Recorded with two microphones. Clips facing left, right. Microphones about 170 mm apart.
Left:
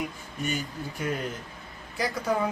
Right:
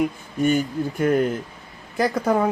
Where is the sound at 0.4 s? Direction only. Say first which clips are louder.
Right 12 dB; 55° right (ahead or behind).